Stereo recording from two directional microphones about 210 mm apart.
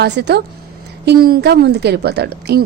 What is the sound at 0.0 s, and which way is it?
A woman's voice, 55° right (ahead or behind).